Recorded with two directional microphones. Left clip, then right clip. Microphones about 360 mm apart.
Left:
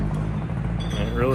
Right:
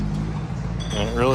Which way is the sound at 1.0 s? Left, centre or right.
Centre.